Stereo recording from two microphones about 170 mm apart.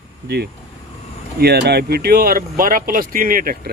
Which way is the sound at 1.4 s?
75° right (ahead or behind).